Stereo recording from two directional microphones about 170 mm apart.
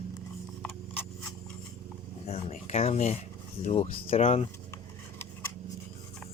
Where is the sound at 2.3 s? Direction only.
40° left (ahead or behind).